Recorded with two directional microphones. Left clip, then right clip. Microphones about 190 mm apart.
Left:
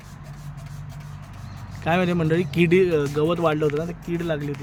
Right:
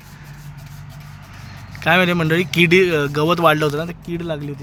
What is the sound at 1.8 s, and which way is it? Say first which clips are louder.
A man's voice: right 7 dB; 5° right (ahead or behind).